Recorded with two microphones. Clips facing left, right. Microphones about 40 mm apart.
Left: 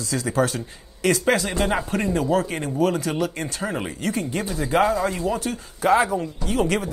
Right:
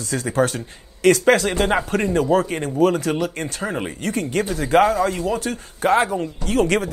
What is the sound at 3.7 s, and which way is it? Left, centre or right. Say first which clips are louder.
Speech: right 2 dB; right.